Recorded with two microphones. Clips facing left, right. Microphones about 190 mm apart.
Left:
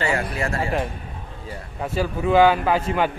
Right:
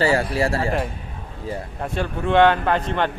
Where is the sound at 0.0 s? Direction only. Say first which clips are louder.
Right 5 dB; 30° right (ahead or behind).